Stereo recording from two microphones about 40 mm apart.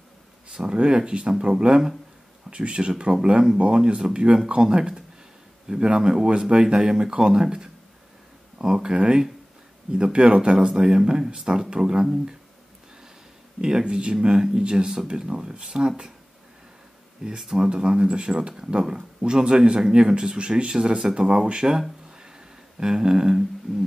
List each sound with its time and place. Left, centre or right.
0.6 s speech: right
13.6 s speech: centre
17.4 s speech: centre
17.6 s speech: right